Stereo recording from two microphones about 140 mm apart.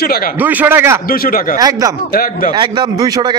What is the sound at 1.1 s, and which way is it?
Speech, 90° left.